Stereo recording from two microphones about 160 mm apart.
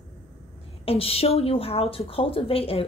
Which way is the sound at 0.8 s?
35° left (ahead or behind).